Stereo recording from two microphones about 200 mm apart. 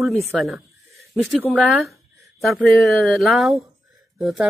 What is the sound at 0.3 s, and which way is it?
Speech, centre (ahead or behind).